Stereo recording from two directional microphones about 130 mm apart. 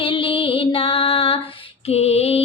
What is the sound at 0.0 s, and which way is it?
Music, 45° left (ahead or behind).